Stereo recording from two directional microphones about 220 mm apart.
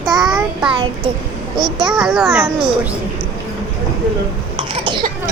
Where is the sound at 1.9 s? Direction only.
5° right (ahead or behind).